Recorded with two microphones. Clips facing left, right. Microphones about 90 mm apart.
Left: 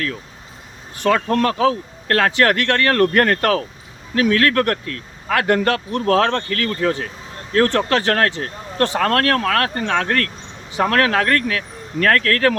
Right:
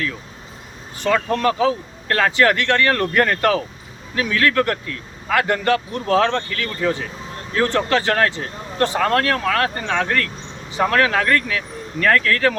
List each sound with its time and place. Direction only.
1.0 s speech: 55° left (ahead or behind)